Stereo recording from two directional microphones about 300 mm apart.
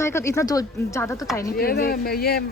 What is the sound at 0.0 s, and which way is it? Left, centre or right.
A woman's voice, centre.